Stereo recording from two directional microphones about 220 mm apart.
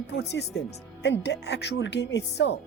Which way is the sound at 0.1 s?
50° left (ahead or behind).